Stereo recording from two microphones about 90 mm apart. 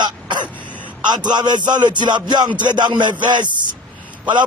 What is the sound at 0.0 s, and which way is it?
Throat clearing, 55° right (ahead or behind).